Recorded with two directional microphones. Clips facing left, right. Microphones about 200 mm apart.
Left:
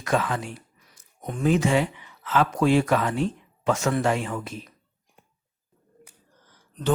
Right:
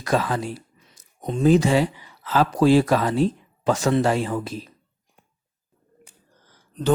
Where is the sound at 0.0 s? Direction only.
35° right (ahead or behind).